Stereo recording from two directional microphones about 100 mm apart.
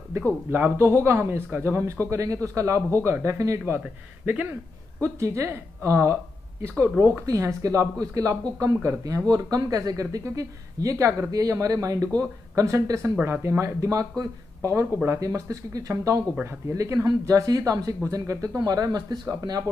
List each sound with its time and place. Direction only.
0.1 s a man's voice: 25° right (ahead or behind)
5.0 s a man's voice: 30° right (ahead or behind)